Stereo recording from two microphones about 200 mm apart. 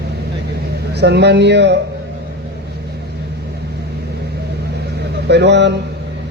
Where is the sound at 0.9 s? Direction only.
55° right (ahead or behind).